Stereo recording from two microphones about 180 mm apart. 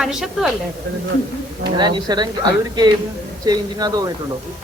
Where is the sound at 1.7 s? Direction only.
25° right (ahead or behind).